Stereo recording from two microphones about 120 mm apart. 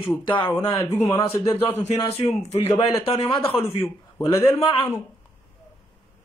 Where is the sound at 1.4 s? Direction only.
25° left (ahead or behind).